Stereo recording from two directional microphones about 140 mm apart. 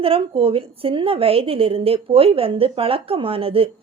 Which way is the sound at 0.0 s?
40° right (ahead or behind).